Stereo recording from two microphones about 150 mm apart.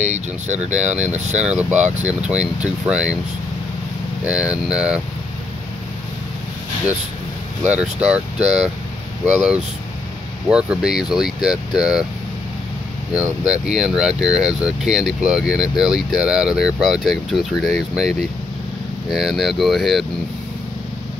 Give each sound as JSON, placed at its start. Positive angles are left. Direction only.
{"t": 0.0, "sound": "speech", "side_deg": -50}
{"t": 1.4, "sound": "speech", "side_deg": -5}
{"t": 4.3, "sound": "speech", "side_deg": -5}
{"t": 7.6, "sound": "speech", "side_deg": -10}
{"t": 13.1, "sound": "speech", "side_deg": -5}